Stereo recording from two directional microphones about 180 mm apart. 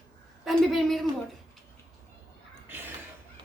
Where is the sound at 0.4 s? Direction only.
Centre (ahead or behind).